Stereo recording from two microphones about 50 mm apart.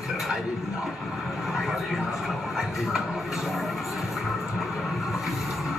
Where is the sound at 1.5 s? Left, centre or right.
Centre.